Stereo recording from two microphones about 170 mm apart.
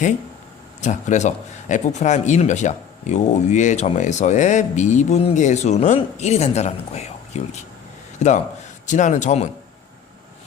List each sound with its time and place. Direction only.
0.8 s speech: 45° left (ahead or behind)